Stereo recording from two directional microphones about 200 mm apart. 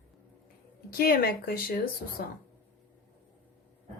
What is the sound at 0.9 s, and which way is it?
Speech, 50° left (ahead or behind).